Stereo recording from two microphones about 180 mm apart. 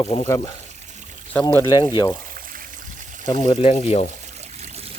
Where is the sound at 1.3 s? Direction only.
15° left (ahead or behind).